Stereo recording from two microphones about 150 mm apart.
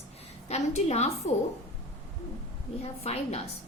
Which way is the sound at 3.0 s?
45° left (ahead or behind).